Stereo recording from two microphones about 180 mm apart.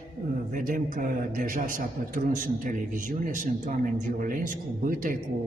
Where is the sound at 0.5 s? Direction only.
50° right (ahead or behind).